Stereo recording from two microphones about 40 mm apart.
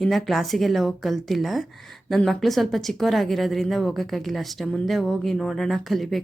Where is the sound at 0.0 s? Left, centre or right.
Centre.